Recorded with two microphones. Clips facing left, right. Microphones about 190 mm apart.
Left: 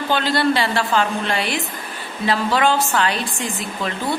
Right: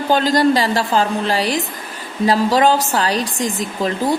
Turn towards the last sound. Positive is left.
turn(degrees=-40)  # may be behind; listen again after turning